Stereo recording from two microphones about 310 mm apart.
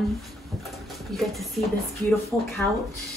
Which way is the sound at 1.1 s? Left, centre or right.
Centre.